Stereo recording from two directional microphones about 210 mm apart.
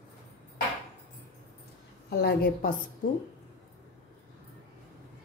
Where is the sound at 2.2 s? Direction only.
45° left (ahead or behind).